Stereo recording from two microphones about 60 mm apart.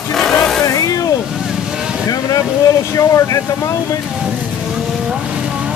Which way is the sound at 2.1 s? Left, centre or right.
Left.